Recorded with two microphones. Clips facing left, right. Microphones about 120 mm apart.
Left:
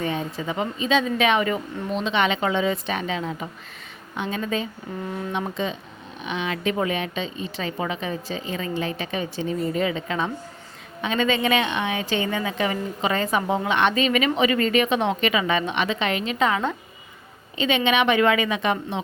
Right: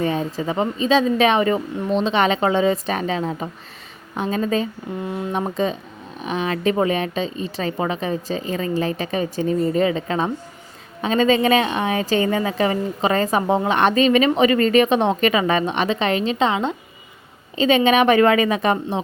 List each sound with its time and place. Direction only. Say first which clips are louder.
0.0 s a sound: right 5 dB; 35° right (ahead or behind)
0.3 s a woman's voice: right 5 dB; 35° right (ahead or behind)
5.0 s speech: right 3 dB; 15° right (ahead or behind)
5.3 s a woman's voice: right 6 dB; 40° right (ahead or behind); by 16.7 s 25° right (ahead or behind)
17.6 s a woman's voice: right 6 dB; 40° right (ahead or behind)